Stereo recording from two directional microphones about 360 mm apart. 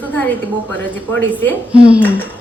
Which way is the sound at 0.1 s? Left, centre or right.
Centre.